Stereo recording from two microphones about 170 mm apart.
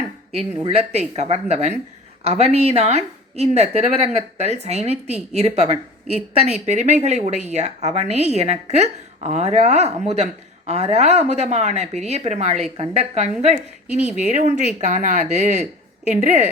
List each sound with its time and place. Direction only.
0.3 s a woman's voice: 35° right (ahead or behind)